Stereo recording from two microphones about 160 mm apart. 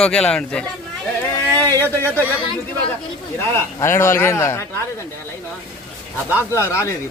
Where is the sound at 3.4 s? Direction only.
15° left (ahead or behind).